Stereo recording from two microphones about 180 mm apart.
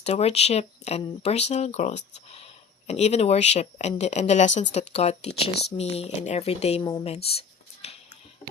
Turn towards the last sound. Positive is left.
turn(degrees=35)  # may be behind; listen again after turning